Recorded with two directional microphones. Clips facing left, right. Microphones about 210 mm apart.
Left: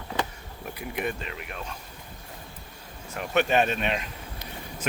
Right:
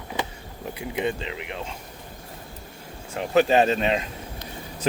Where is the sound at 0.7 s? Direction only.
25° right (ahead or behind).